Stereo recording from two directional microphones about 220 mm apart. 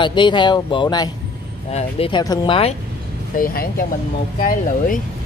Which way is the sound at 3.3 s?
40° left (ahead or behind).